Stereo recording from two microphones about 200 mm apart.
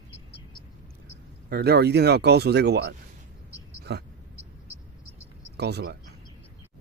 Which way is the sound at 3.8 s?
55° right (ahead or behind).